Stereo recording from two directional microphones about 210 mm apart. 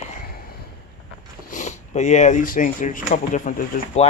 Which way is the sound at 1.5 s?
35° left (ahead or behind).